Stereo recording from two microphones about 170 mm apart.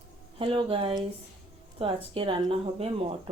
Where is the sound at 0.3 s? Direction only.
30° right (ahead or behind).